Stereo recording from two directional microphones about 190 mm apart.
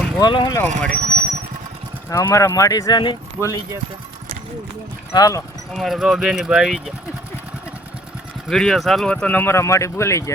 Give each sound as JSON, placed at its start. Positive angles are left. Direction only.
{"t": 0.2, "sound": "speech", "side_deg": 20}
{"t": 0.9, "sound": "speech", "side_deg": -50}
{"t": 2.0, "sound": "speech", "side_deg": 15}
{"t": 5.1, "sound": "speech", "side_deg": 20}
{"t": 5.7, "sound": "speech", "side_deg": 0}
{"t": 8.4, "sound": "speech", "side_deg": 0}